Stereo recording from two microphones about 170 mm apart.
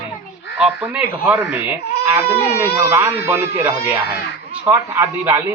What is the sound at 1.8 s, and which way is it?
Crying, 70° left (ahead or behind).